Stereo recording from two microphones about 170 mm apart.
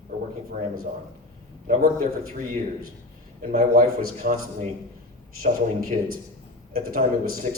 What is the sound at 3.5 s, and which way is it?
A man's voice, 60° right (ahead or behind).